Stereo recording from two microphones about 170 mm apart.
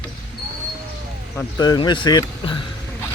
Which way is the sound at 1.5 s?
25° left (ahead or behind).